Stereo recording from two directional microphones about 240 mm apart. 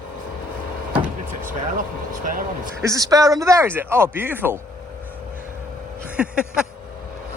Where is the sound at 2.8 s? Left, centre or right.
Centre.